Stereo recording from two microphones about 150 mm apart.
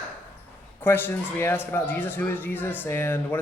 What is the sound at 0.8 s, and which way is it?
A man's voice, 15° left (ahead or behind).